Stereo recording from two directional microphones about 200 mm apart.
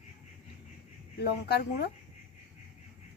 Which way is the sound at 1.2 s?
55° left (ahead or behind).